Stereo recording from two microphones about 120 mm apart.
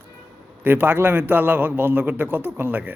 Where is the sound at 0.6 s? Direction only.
15° right (ahead or behind).